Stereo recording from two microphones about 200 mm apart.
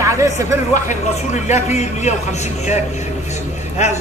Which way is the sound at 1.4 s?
35° left (ahead or behind).